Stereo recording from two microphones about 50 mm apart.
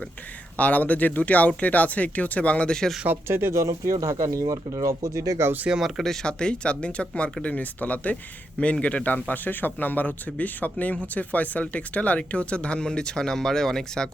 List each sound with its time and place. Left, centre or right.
0.5 s speech: left; by 2.9 s centre
3.2 s speech: right
3.6 s speech: right
6.2 s speech: centre
8.1 s speech: left